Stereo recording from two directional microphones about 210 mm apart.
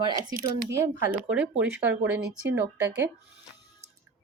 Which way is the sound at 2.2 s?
50° right (ahead or behind).